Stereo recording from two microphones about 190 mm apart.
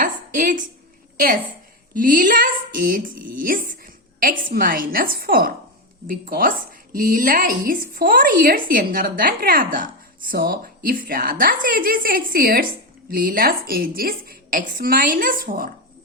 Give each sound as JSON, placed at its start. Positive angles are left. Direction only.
{"t": 0.0, "sound": "a woman's voice", "side_deg": -45}